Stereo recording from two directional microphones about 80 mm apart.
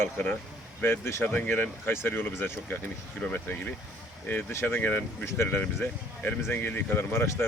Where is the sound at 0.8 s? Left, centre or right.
Left.